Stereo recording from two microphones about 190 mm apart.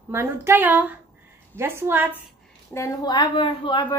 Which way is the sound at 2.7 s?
20° left (ahead or behind).